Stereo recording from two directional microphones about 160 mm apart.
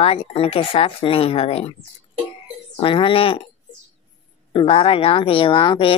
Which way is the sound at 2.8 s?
30° left (ahead or behind).